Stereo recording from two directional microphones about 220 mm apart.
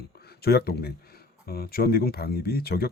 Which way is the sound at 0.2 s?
45° left (ahead or behind).